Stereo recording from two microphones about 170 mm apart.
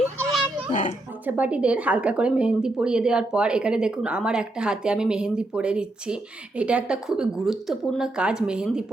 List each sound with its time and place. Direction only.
0.7 s speech: 50° left (ahead or behind)
1.2 s a woman's voice: 10° right (ahead or behind)